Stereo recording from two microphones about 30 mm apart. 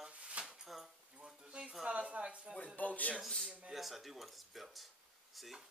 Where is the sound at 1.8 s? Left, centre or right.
Right.